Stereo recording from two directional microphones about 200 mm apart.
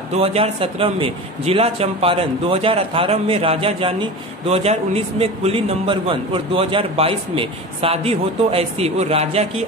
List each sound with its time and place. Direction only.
0.1 s a man's voice: 30° right (ahead or behind)